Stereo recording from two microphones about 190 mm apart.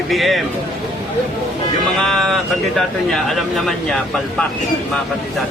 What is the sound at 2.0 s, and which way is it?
Speech, centre (ahead or behind).